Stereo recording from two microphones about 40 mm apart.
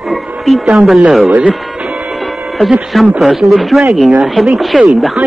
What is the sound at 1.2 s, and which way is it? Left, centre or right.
Speech, right.